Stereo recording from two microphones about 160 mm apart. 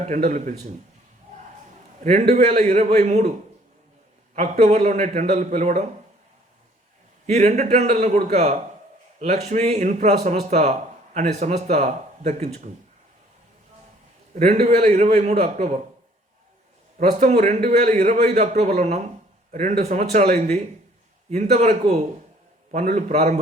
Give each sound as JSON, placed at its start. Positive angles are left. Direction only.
{"t": 0.3, "sound": "speech", "side_deg": -55}
{"t": 2.3, "sound": "speech", "side_deg": -45}
{"t": 4.4, "sound": "speech", "side_deg": -45}
{"t": 7.3, "sound": "speech", "side_deg": -45}
{"t": 10.5, "sound": "a sound", "side_deg": -45}
{"t": 11.3, "sound": "speech", "side_deg": -45}
{"t": 14.3, "sound": "speech", "side_deg": -45}
{"t": 17.0, "sound": "speech", "side_deg": -45}
{"t": 20.2, "sound": "speech", "side_deg": -70}
{"t": 21.5, "sound": "speech", "side_deg": -45}